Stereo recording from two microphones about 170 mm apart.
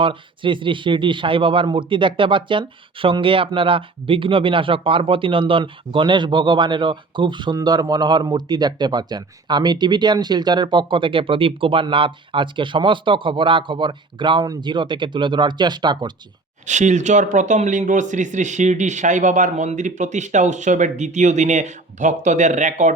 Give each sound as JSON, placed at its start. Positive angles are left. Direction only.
{"t": 0.0, "sound": "speech", "side_deg": -30}
{"t": 16.6, "sound": "speech", "side_deg": -45}